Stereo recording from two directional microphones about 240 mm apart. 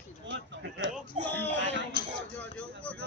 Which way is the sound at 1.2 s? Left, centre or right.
Right.